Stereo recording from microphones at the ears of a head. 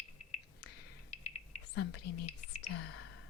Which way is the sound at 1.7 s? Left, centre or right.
Left.